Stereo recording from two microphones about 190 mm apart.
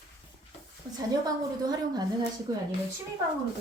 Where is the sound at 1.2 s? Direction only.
20° right (ahead or behind).